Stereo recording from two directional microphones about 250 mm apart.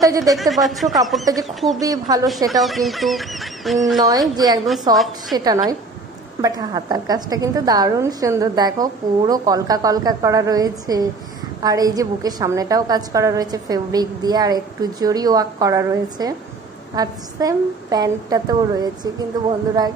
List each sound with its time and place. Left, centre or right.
0.0 s a woman's voice: centre
0.4 s speech: centre
1.8 s a woman's voice: centre
2.5 s speech: centre
4.9 s a woman's voice: centre